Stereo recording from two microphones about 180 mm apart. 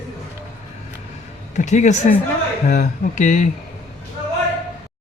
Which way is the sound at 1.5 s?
40° left (ahead or behind).